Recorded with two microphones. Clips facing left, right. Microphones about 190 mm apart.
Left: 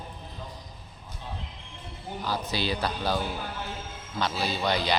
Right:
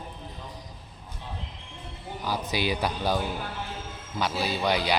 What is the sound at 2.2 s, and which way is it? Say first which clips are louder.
Speech: right 2 dB; 15° right (ahead or behind).